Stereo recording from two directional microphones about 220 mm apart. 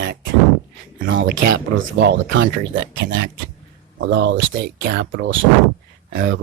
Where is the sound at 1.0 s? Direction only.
60° right (ahead or behind).